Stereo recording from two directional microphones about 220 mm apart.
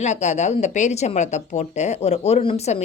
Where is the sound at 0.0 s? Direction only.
30° left (ahead or behind).